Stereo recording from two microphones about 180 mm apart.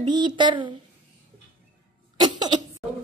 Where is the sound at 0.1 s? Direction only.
25° right (ahead or behind).